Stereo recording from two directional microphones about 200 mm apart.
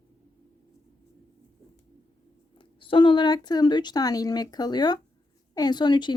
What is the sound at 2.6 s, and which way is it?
Speech, 25° left (ahead or behind).